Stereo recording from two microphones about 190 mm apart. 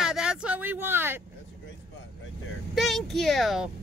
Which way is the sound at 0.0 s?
5° right (ahead or behind).